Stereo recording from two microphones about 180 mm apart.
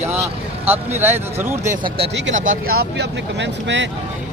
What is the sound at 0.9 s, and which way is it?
Speech, 10° right (ahead or behind).